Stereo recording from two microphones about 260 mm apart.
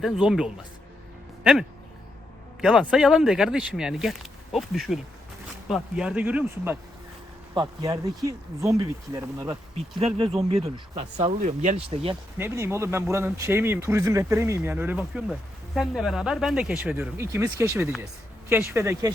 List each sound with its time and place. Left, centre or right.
0.0 s speech: centre
2.6 s speech: centre
7.5 s speech: centre
12.4 s speech: centre